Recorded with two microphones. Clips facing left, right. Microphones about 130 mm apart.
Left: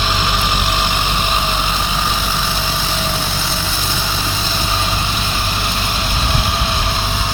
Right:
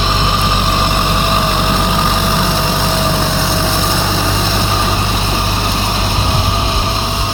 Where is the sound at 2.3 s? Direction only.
80° right.